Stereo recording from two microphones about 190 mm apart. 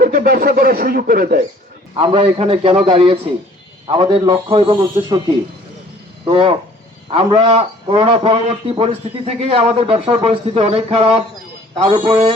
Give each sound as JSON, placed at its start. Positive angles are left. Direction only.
{"t": 0.0, "sound": "speech", "side_deg": -50}
{"t": 2.0, "sound": "a man's voice", "side_deg": -30}
{"t": 6.2, "sound": "a man's voice", "side_deg": -30}